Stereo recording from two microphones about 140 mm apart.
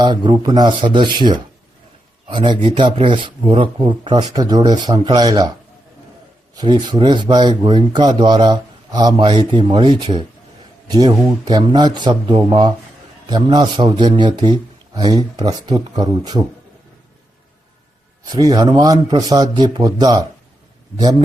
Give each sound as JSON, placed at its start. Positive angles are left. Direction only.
{"t": 0.0, "sound": "a man's voice", "side_deg": -35}
{"t": 6.5, "sound": "speech", "side_deg": -30}
{"t": 18.3, "sound": "a man's voice", "side_deg": -30}